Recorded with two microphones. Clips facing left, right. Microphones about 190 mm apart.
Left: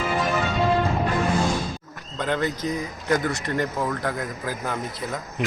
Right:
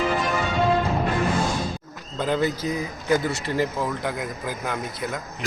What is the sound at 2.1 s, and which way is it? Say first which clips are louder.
Speech: right 2 dB; 5° right (ahead or behind).